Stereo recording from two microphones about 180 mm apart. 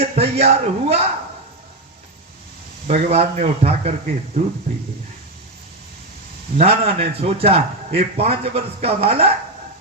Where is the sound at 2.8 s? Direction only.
35° right (ahead or behind).